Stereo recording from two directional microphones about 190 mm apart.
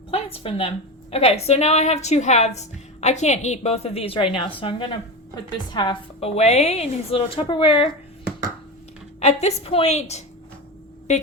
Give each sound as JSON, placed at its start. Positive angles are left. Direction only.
{"t": 0.3, "sound": "a woman's voice", "side_deg": 30}
{"t": 9.2, "sound": "a woman's voice", "side_deg": 35}